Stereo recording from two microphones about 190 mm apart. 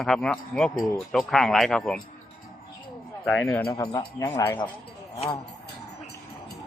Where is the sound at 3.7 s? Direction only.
15° left (ahead or behind).